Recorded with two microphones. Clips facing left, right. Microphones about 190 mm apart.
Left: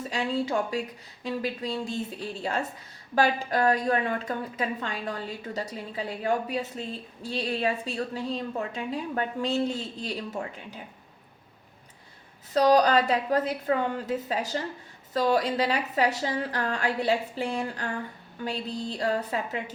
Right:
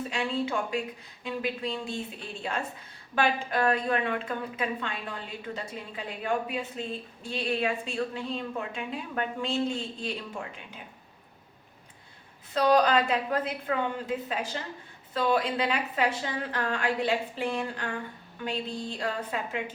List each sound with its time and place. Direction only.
0.1 s a woman's voice: 35° left (ahead or behind)
3.2 s a woman's voice: 40° left (ahead or behind)
12.5 s a woman's voice: 35° left (ahead or behind)